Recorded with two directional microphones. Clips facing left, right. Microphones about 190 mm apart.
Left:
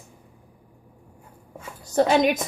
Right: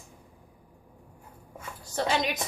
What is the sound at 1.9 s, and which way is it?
Speech, 50° left (ahead or behind).